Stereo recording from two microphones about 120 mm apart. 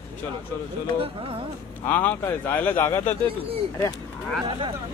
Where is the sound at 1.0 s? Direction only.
50° right (ahead or behind).